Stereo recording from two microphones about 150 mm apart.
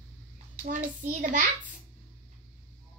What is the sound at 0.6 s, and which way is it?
Speech, 60° right (ahead or behind).